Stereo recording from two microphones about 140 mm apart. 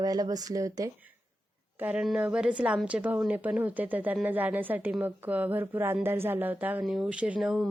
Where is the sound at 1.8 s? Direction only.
10° right (ahead or behind).